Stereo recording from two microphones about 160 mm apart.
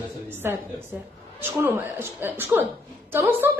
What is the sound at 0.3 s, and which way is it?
A woman's voice, 15° right (ahead or behind).